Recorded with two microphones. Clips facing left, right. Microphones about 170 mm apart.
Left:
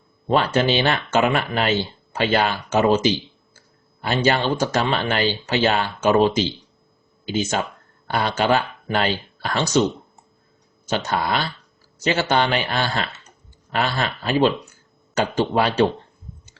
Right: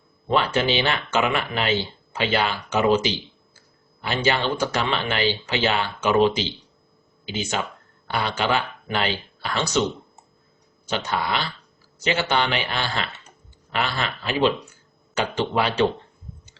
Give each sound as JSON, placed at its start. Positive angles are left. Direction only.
{"t": 0.3, "sound": "speech", "side_deg": 40}
{"t": 10.8, "sound": "speech", "side_deg": 40}